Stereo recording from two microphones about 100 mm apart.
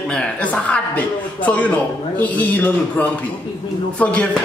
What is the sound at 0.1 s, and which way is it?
Speech, 10° left (ahead or behind).